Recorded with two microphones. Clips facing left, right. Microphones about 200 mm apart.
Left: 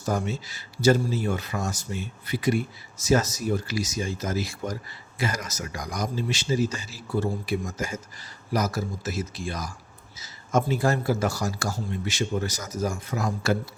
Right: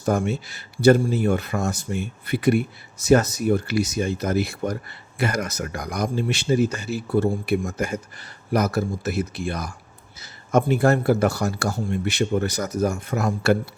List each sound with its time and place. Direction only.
0.0 s speech: 60° right (ahead or behind)